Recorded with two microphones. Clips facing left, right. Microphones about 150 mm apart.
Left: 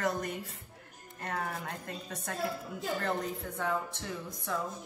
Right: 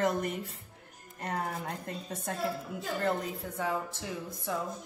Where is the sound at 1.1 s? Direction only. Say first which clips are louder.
Right 2 dB; 25° right (ahead or behind).